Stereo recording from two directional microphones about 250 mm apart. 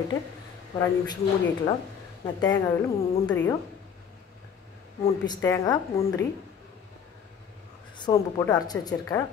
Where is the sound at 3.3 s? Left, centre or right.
Centre.